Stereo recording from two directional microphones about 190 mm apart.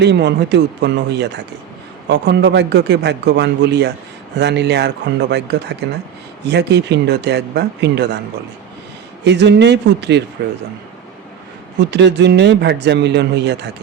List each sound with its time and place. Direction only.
0.0 s a man's voice: 65° right (ahead or behind)
9.2 s a man's voice: 65° right (ahead or behind)
11.8 s a man's voice: 65° right (ahead or behind)